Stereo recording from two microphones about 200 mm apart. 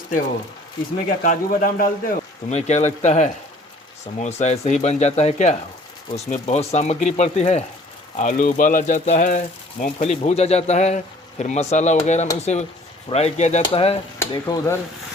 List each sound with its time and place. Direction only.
1.2 s speech: 45° left (ahead or behind)
14.2 s speech: 15° left (ahead or behind)